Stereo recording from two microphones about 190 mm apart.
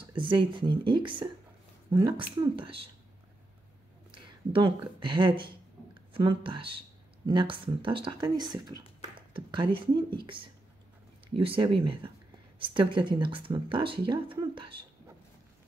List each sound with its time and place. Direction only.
0.0 s speech: 25° right (ahead or behind)
4.5 s speech: 25° right (ahead or behind)